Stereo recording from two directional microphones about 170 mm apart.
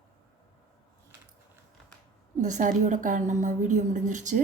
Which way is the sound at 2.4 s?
45° right (ahead or behind).